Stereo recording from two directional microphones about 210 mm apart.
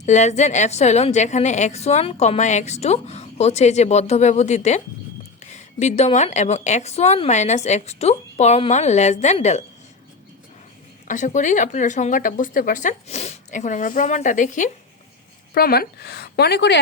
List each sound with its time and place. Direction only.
0.0 s a woman's voice: 35° left (ahead or behind)
11.1 s a woman's voice: 35° left (ahead or behind); by 16.8 s 55° left (ahead or behind)